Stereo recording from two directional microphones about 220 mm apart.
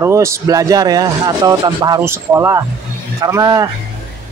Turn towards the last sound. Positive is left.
turn(degrees=-15)  # may be behind; listen again after turning